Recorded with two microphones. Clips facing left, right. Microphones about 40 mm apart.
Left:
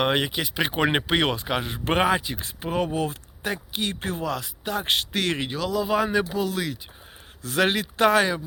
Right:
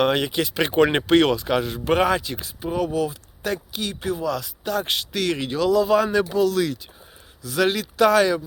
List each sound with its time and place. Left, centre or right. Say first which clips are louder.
0.0 s speech: right 3 dB; left
0.3 s speech: right 3 dB; centre
1.8 s speech: right 2 dB; left
2.0 s speech: right 1 dB; centre
2.4 s speech: right 1 dB; left
3.4 s speech: right 1 dB; left
4.4 s speech: right 3 dB; left
4.9 s speech: even; left
5.5 s speech: right 6 dB; centre
7.4 s speech: right 1 dB; left